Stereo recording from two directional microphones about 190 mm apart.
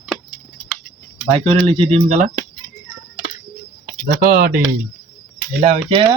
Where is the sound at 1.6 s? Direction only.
30° right (ahead or behind).